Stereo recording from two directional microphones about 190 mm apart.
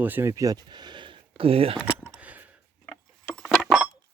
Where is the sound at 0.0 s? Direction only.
10° right (ahead or behind); by 1.8 s 30° right (ahead or behind).